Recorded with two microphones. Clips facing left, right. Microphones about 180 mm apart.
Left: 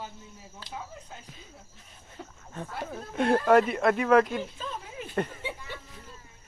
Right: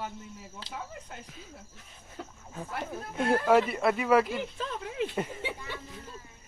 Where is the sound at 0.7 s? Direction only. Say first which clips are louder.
Even; 70° right (ahead or behind).